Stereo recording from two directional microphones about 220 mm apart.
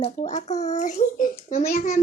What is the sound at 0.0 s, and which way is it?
A child's voice, 30° left (ahead or behind).